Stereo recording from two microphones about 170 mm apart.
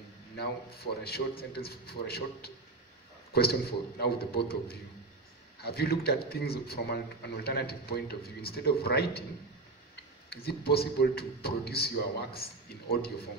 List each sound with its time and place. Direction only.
0.4 s a man's voice: 70° left (ahead or behind)
10.3 s a man's voice: 70° left (ahead or behind)